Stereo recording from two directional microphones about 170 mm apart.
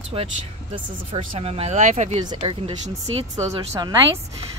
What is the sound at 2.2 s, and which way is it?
A woman's voice, 30° right (ahead or behind).